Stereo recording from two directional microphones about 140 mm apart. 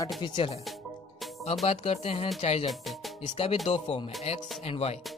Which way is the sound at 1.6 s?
45° left (ahead or behind).